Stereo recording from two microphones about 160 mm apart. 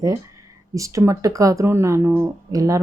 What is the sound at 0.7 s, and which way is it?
Speech, 20° right (ahead or behind).